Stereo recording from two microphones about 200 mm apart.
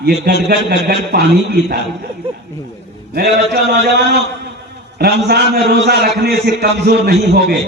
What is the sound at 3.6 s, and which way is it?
A man's voice, 55° right (ahead or behind).